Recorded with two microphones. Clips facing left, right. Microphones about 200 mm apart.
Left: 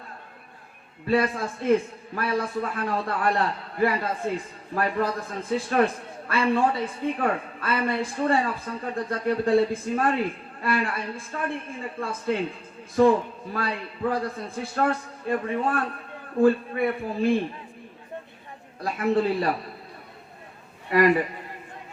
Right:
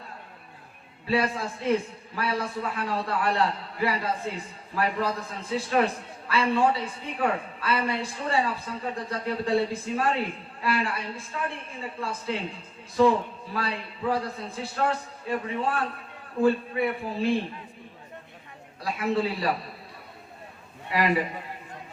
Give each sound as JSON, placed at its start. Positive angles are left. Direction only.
{"t": 1.0, "sound": "a man's voice", "side_deg": 50}
{"t": 18.8, "sound": "a man's voice", "side_deg": 50}
{"t": 20.9, "sound": "a man's voice", "side_deg": 50}